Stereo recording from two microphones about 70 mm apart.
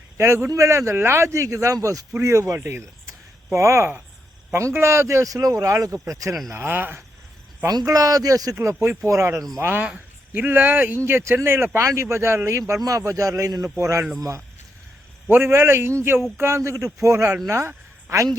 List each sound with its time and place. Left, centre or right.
0.2 s speech: right
0.5 s speech: right
2.6 s a sound: right
4.5 s speech: right
6.5 s speech: right
7.9 s speech: right
9.0 s speech: right
12.8 s speech: right
15.3 s a man's voice: right